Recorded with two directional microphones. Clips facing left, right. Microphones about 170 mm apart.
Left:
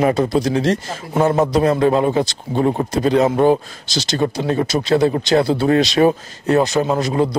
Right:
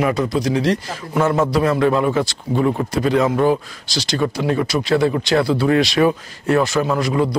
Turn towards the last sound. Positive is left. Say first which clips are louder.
# left 1 dB
turn(degrees=25)  # may be behind; listen again after turning